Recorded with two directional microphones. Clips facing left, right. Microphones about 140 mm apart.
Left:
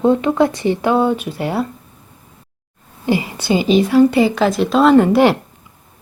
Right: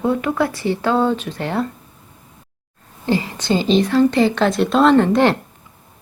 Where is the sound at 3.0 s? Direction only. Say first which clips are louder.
Left 2 dB; 15° left (ahead or behind).